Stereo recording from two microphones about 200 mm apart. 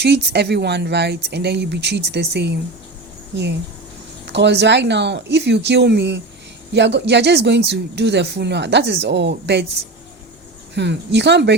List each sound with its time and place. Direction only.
0.0 s speech: 55° right (ahead or behind)
4.3 s speech: 60° right (ahead or behind)
10.8 s speech: 60° right (ahead or behind)